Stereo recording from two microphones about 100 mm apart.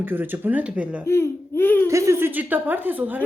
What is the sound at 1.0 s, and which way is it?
Speech, 25° left (ahead or behind).